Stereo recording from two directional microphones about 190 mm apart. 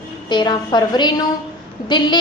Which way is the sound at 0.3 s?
25° left (ahead or behind).